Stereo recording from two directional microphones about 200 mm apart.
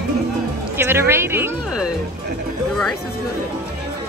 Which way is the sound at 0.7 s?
10° right (ahead or behind).